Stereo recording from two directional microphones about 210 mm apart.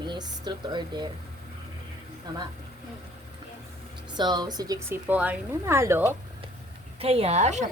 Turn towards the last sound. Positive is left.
turn(degrees=-35)  # may be behind; listen again after turning